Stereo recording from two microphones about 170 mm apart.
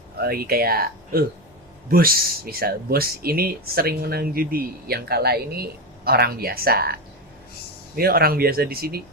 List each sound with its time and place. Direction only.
0.2 s speech: 60° right (ahead or behind)
7.9 s speech: 60° right (ahead or behind)